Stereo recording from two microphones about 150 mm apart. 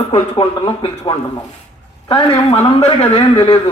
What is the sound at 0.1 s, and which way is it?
A man's voice, 40° left (ahead or behind).